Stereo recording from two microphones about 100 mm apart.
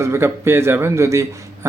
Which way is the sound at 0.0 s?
25° right (ahead or behind).